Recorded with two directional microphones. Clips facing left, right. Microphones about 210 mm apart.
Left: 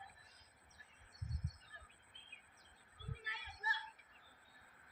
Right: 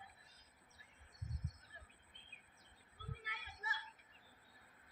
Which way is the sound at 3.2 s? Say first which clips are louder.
Left 2 dB; 50° right (ahead or behind).